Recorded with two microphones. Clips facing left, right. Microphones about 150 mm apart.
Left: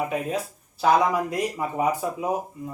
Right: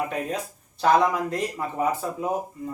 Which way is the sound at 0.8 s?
10° left (ahead or behind).